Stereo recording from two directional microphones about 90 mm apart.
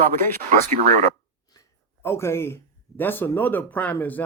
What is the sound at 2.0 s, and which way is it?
Speech, 30° left (ahead or behind).